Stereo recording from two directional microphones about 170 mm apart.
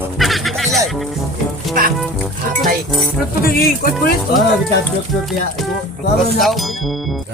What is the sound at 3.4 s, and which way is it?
Speech, 60° left (ahead or behind).